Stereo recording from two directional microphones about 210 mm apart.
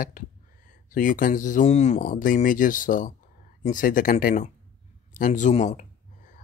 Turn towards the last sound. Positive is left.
turn(degrees=35)  # may be behind; listen again after turning